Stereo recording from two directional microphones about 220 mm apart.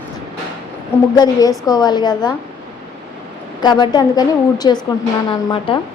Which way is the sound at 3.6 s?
20° left (ahead or behind).